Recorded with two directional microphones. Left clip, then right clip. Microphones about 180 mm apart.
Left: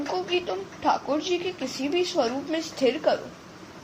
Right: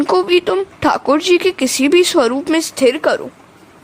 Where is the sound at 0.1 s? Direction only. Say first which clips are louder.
Right 14 dB; 55° right (ahead or behind).